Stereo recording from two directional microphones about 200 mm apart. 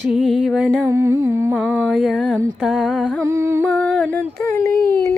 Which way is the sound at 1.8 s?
Centre (ahead or behind).